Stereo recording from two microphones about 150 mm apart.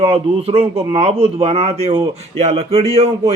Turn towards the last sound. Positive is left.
turn(degrees=-40)  # may be behind; listen again after turning